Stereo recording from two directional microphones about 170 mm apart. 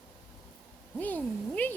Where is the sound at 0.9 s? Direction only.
10° left (ahead or behind).